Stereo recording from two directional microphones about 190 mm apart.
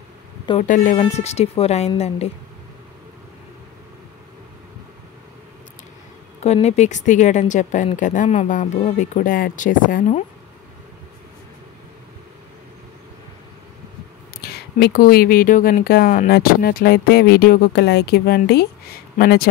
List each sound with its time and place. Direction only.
0.5 s a woman's voice: 40° left (ahead or behind)
6.4 s a woman's voice: 35° left (ahead or behind)
14.4 s speech: 55° left (ahead or behind)